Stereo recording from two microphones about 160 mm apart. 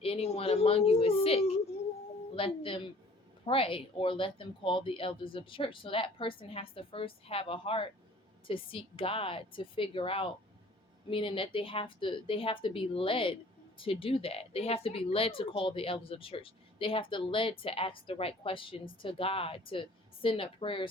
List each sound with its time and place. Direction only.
0.0 s a woman's voice: 40° left (ahead or behind)